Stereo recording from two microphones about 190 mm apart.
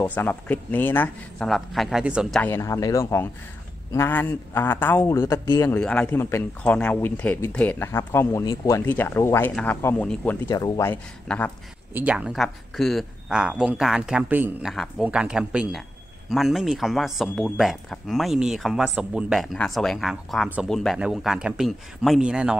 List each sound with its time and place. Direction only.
0.0 s a man's voice: 10° left (ahead or behind)
2.4 s a man's voice: 15° left (ahead or behind)
11.9 s speech: 10° right (ahead or behind)